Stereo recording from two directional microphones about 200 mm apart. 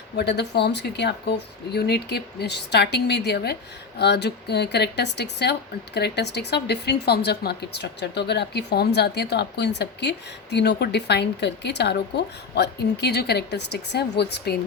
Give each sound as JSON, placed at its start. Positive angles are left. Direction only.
{"t": 0.2, "sound": "speech", "side_deg": 55}